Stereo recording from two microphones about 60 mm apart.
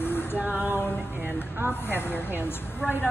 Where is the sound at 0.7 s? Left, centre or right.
Left.